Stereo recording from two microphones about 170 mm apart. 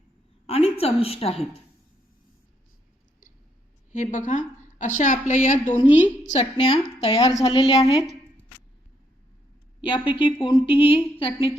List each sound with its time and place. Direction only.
0.4 s a sound: 35° left (ahead or behind)
3.9 s a woman's voice: 50° left (ahead or behind)
6.7 s a woman's voice: 25° left (ahead or behind)
9.8 s a woman's voice: 30° left (ahead or behind)